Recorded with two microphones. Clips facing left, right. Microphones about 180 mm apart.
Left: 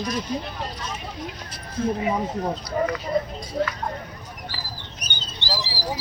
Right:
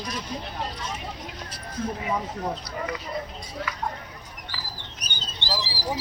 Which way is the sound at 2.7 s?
35° left (ahead or behind).